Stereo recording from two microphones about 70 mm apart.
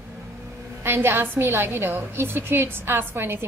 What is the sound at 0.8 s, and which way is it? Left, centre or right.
A woman's voice, right.